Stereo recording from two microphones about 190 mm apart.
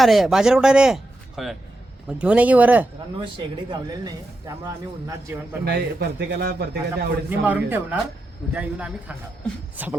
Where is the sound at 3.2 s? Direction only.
25° right (ahead or behind).